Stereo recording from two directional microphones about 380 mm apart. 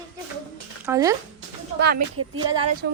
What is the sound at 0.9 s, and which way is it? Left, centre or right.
Speech, centre.